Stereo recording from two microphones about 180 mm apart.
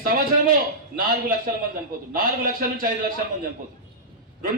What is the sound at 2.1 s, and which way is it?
A man's voice, 50° right (ahead or behind).